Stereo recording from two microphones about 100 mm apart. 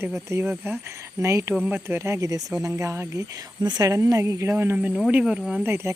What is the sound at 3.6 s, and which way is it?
Speech, 40° right (ahead or behind).